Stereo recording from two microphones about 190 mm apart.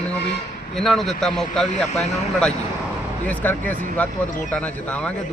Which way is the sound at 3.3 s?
10° left (ahead or behind).